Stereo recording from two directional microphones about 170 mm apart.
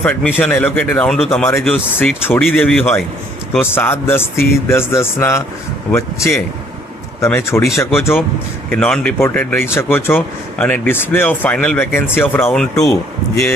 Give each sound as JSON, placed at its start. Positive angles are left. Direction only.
{"t": 0.0, "sound": "speech", "side_deg": 10}